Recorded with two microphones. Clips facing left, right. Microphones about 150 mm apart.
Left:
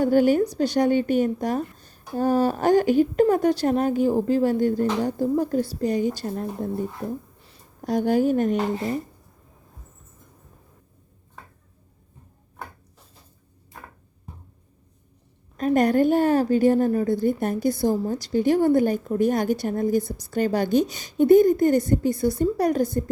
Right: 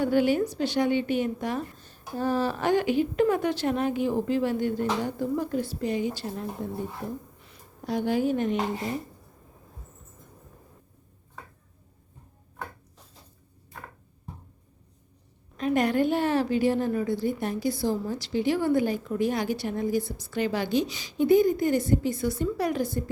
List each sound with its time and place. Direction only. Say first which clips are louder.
0.0 s a woman's voice: left 5 dB; 45° left (ahead or behind)
15.5 s a woman's voice: left 5 dB; 45° left (ahead or behind)